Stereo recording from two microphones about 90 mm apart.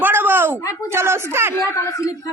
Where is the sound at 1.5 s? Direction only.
35° left (ahead or behind).